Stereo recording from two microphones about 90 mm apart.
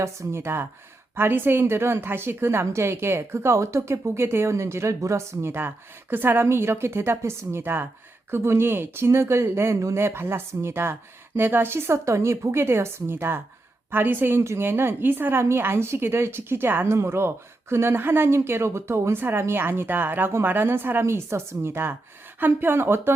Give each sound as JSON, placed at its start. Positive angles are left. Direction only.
{"t": 0.0, "sound": "a woman's voice", "side_deg": -30}